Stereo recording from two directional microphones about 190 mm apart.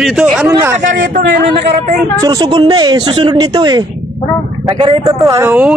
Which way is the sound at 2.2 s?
20° right (ahead or behind).